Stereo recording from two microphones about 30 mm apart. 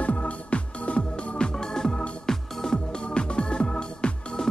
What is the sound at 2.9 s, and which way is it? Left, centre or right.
Music, left.